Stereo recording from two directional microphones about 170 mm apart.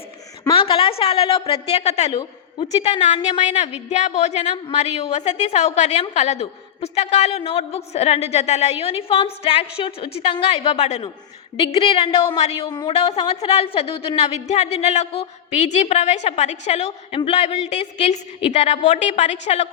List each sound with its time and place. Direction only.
0.4 s a woman's voice: 30° left (ahead or behind)